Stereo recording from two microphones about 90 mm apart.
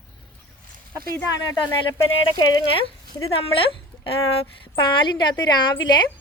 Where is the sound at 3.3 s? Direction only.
90° left.